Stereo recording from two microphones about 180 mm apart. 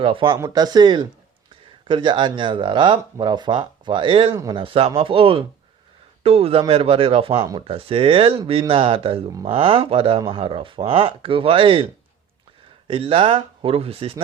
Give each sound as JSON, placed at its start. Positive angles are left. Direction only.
{"t": 0.0, "sound": "speech", "side_deg": -30}
{"t": 12.9, "sound": "speech", "side_deg": -30}